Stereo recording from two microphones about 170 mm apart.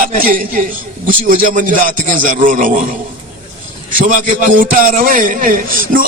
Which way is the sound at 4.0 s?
50° right (ahead or behind).